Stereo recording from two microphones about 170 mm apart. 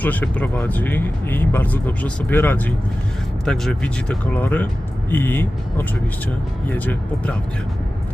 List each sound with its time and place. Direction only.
0.0 s speech: 10° left (ahead or behind)